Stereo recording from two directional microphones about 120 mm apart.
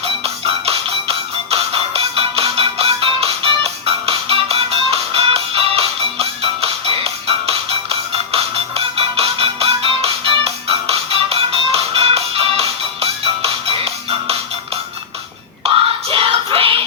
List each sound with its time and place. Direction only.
0.0 s music: 55° right (ahead or behind)
15.6 s music: 50° right (ahead or behind)